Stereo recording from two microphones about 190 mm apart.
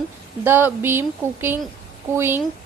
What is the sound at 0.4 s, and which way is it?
Speech, 10° right (ahead or behind).